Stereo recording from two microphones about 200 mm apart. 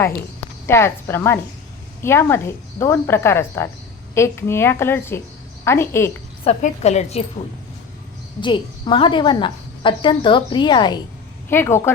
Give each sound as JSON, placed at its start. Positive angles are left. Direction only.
{"t": 0.7, "sound": "a woman's voice", "side_deg": 10}
{"t": 6.4, "sound": "a woman's voice", "side_deg": 30}
{"t": 8.4, "sound": "a woman's voice", "side_deg": 25}
{"t": 11.4, "sound": "a woman's voice", "side_deg": 10}